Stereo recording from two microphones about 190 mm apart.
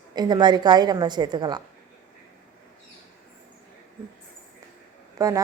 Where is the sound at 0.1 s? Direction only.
20° right (ahead or behind).